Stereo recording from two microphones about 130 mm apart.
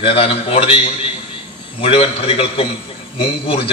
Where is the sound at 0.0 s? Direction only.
45° left (ahead or behind).